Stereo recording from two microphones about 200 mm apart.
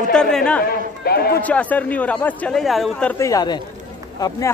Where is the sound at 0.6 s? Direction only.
50° left (ahead or behind).